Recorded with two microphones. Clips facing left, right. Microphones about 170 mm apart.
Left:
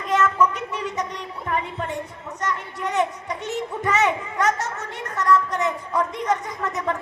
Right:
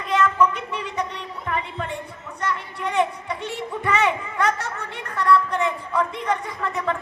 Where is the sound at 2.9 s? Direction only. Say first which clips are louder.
Right 1 dB; 40° left (ahead or behind).